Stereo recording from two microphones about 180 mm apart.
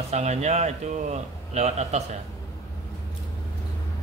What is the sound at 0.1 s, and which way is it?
A man's voice, 40° right (ahead or behind).